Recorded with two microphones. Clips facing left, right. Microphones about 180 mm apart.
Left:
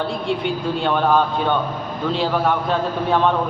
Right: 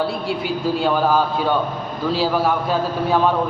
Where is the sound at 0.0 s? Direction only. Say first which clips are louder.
Even; 5° right (ahead or behind).